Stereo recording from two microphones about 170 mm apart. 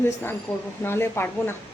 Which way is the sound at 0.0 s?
15° left (ahead or behind).